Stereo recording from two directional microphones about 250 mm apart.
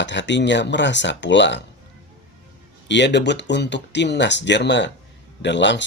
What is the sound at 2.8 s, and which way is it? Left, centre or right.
Speech, left.